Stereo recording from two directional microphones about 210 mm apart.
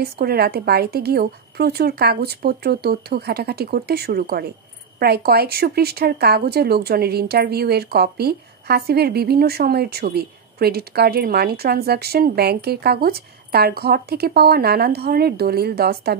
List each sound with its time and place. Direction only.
0.0 s speech: 50° right (ahead or behind)